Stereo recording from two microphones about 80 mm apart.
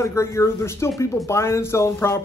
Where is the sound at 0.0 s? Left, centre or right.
Left.